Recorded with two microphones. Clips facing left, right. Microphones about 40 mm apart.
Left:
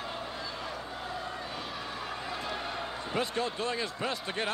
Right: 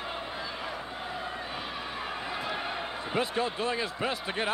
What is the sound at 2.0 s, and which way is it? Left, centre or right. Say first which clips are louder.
Speech: right 3 dB; centre.